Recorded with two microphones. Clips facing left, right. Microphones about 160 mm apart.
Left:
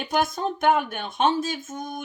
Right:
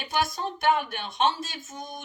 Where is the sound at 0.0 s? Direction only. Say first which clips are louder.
Left 4 dB; 50° left (ahead or behind).